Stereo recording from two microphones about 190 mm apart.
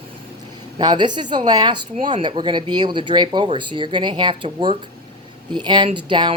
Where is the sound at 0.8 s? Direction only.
25° right (ahead or behind).